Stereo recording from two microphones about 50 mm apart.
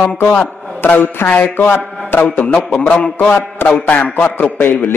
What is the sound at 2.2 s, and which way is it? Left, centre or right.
Speech, left.